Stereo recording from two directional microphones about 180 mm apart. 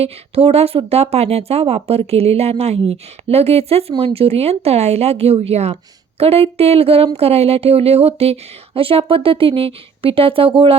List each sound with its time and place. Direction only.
0.0 s speech: 35° right (ahead or behind)